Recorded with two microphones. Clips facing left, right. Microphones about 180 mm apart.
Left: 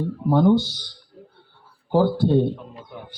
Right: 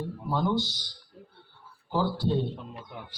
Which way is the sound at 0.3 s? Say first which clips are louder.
Left 11 dB; 60° left (ahead or behind).